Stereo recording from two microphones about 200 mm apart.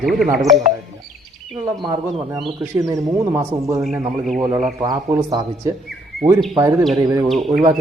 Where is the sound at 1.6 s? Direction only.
20° right (ahead or behind).